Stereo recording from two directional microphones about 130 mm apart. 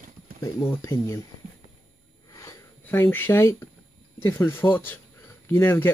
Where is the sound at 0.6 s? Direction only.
20° left (ahead or behind).